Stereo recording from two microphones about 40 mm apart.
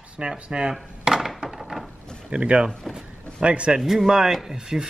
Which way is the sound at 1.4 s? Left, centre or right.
Centre.